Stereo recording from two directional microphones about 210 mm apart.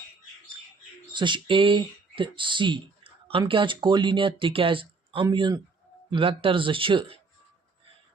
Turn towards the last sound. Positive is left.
turn(degrees=-25)  # may be behind; listen again after turning